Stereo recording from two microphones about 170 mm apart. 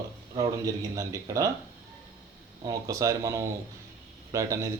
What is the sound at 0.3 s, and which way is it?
Speech, 20° right (ahead or behind).